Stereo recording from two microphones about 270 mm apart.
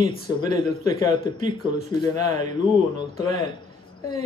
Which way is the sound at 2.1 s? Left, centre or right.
Right.